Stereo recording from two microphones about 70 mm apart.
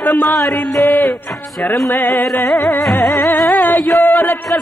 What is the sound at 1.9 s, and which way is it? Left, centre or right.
Music, left.